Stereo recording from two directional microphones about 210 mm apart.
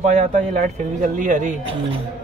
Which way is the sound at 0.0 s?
35° right (ahead or behind).